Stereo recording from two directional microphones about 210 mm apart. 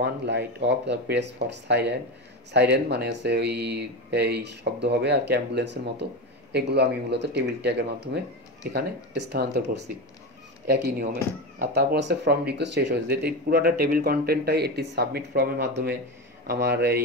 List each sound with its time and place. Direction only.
0.0 s speech: 55° right (ahead or behind)
11.7 s speech: 55° right (ahead or behind)